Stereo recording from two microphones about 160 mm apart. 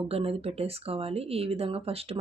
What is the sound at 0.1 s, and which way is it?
Speech, 40° right (ahead or behind).